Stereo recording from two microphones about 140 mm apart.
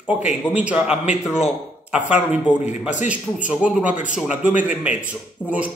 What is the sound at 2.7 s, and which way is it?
Speech, 60° left (ahead or behind).